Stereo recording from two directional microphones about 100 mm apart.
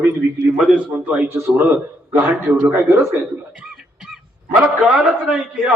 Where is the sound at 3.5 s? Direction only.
10° right (ahead or behind).